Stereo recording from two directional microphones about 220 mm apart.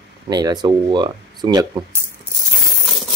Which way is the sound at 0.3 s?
15° right (ahead or behind).